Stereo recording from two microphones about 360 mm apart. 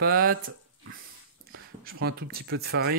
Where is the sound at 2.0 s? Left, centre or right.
Right.